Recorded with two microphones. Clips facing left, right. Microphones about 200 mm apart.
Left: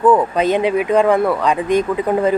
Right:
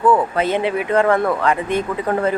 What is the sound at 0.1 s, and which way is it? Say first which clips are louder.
Speech: left 3 dB; 15° left (ahead or behind).